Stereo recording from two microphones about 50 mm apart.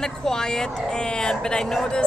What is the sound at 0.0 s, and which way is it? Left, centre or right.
Speech, centre.